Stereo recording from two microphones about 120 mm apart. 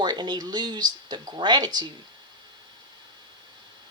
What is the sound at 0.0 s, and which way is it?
Speech, 40° right (ahead or behind).